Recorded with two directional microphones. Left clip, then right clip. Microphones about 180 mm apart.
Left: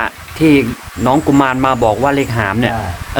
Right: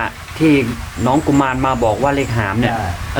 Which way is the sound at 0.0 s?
65° left (ahead or behind).